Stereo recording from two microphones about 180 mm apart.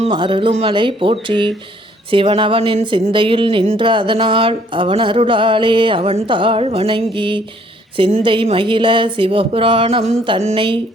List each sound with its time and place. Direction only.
0.0 s speech: 30° right (ahead or behind)